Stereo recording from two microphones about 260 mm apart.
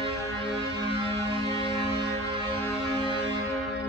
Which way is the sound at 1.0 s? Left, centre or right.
Right.